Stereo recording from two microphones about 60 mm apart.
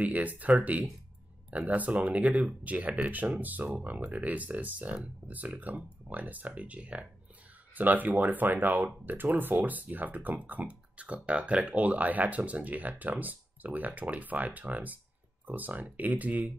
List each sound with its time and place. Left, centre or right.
0.0 s speech: right